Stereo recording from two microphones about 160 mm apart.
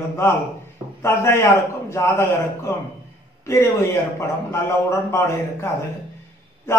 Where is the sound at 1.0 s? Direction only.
15° left (ahead or behind).